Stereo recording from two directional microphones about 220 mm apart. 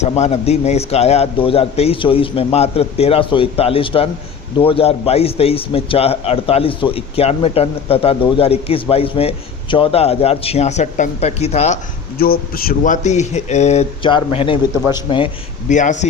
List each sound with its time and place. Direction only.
0.0 s a man's voice: 30° left (ahead or behind)
12.2 s speech: 45° left (ahead or behind); by 15.3 s 20° left (ahead or behind)
15.7 s speech: 35° left (ahead or behind)